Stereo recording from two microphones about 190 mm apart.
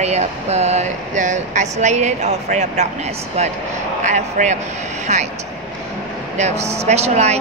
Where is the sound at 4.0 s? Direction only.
40° right (ahead or behind).